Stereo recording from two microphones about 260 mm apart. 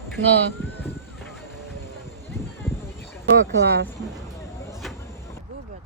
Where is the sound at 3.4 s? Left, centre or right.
Right.